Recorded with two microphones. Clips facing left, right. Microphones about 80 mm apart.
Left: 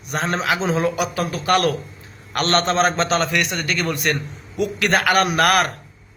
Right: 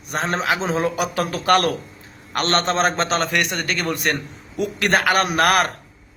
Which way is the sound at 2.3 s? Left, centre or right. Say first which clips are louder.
Left 1 dB; right.